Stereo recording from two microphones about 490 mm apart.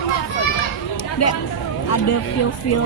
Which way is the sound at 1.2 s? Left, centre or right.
Left.